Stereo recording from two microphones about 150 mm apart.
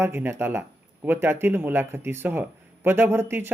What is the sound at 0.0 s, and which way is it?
Speech, 15° right (ahead or behind).